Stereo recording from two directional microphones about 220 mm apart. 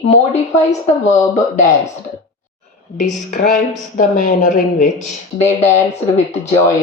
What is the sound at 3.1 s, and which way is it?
Speech, 40° left (ahead or behind).